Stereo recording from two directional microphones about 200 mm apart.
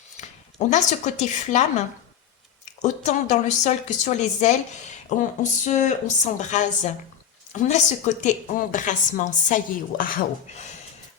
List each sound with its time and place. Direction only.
0.2 s speech: 35° left (ahead or behind)
2.6 s speech: 35° left (ahead or behind)